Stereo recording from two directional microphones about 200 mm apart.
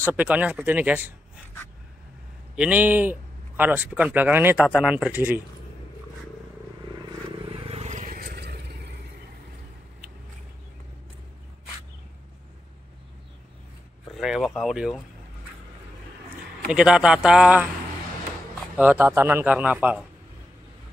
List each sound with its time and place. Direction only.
0.0 s a man's voice: 5° right (ahead or behind)
2.5 s a man's voice: 5° right (ahead or behind)
7.4 s vehicle: 25° right (ahead or behind); by 8.7 s 55° right (ahead or behind)
14.1 s speech: centre (ahead or behind)
16.7 s speech: 5° right (ahead or behind)
18.8 s a man's voice: 10° right (ahead or behind)